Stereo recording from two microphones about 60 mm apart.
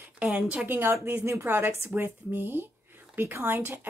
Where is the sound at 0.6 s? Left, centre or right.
Right.